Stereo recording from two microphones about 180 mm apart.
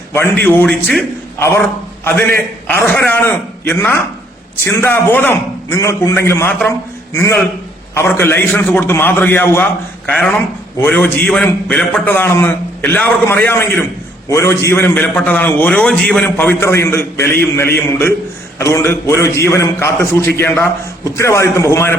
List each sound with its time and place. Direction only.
0.4 s a man's voice: 10° left (ahead or behind)
2.6 s a man's voice: 10° left (ahead or behind)